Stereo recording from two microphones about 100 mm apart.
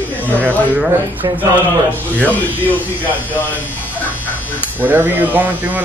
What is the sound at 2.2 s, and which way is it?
Speech, 15° left (ahead or behind).